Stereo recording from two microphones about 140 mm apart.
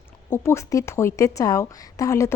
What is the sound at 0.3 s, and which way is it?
A woman's voice, 20° left (ahead or behind).